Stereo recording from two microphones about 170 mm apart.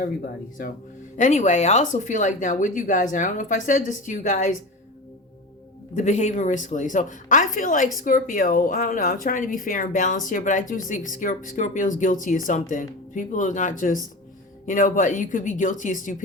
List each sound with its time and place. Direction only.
1.1 s speech: 45° left (ahead or behind)
5.9 s speech: 45° left (ahead or behind)